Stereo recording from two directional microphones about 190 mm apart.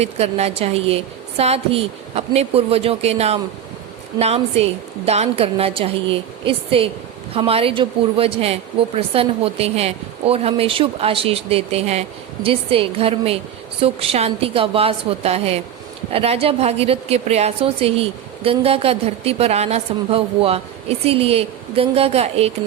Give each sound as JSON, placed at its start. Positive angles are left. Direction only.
{"t": 0.0, "sound": "a woman's voice", "side_deg": -35}